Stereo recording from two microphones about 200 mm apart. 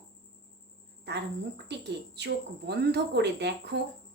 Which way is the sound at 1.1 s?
60° right (ahead or behind).